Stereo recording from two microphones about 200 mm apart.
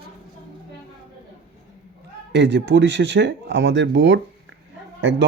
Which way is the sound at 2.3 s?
60° right (ahead or behind).